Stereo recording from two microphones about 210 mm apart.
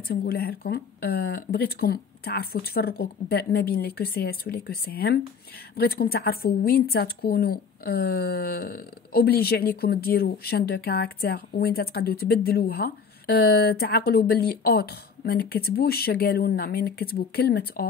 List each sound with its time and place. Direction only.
0.1 s a woman's voice: 45° left (ahead or behind)